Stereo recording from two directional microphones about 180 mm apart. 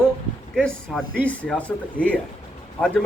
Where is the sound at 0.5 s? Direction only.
5° left (ahead or behind).